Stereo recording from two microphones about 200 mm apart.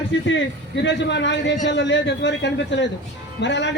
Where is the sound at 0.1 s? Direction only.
70° left (ahead or behind).